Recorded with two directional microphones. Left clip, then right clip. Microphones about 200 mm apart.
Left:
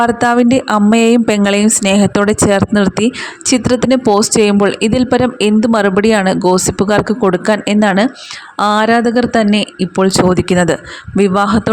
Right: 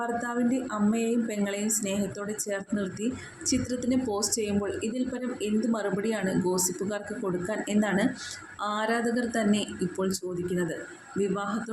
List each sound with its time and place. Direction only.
0.0 s speech: 50° left (ahead or behind)